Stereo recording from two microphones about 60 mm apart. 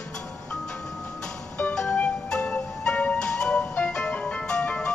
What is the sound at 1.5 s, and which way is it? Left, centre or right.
Music, centre.